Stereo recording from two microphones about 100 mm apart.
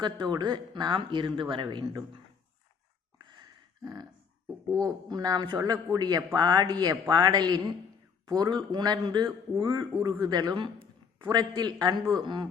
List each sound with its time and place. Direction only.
0.0 s a man's voice: 45° right (ahead or behind)
4.4 s a man's voice: 35° right (ahead or behind); by 12.5 s 55° right (ahead or behind)